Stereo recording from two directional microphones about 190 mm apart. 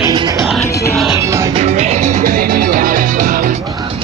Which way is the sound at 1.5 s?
35° right (ahead or behind).